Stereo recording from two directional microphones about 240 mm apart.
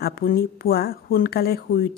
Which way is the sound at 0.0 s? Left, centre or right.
Left.